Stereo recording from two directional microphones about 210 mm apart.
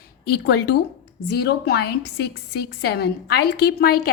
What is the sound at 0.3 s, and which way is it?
A woman's voice, 50° left (ahead or behind).